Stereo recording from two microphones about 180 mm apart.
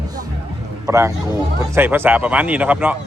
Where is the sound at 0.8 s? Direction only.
15° right (ahead or behind).